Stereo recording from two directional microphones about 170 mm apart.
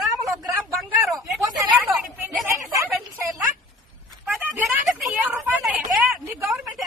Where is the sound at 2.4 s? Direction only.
15° right (ahead or behind).